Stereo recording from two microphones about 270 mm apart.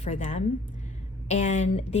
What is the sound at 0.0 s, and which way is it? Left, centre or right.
Speech, left.